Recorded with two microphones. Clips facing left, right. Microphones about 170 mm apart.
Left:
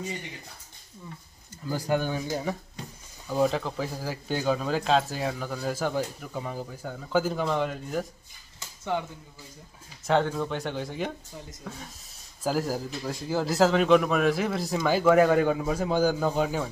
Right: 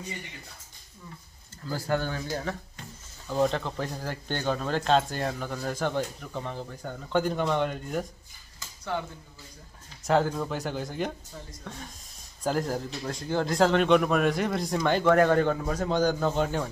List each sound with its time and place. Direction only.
1.7 s speech: 15° left (ahead or behind)
3.3 s speech: 5° left (ahead or behind)
8.5 s a sound: 20° left (ahead or behind)
10.0 s speech: centre (ahead or behind)